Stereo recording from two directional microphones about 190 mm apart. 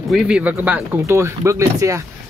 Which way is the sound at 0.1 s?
5° right (ahead or behind).